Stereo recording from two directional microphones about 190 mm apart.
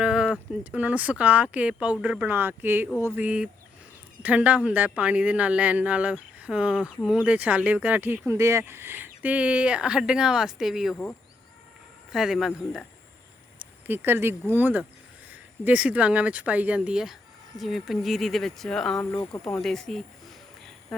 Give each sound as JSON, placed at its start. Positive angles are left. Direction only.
{"t": 0.0, "sound": "speech", "side_deg": -5}
{"t": 12.1, "sound": "speech", "side_deg": 0}
{"t": 13.6, "sound": "a sound", "side_deg": -10}
{"t": 14.5, "sound": "speech", "side_deg": -10}
{"t": 18.9, "sound": "speech", "side_deg": 15}
{"t": 19.6, "sound": "speech", "side_deg": 0}